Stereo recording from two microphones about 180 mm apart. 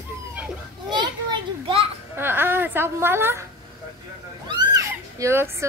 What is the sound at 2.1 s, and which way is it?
A woman's voice, 10° right (ahead or behind).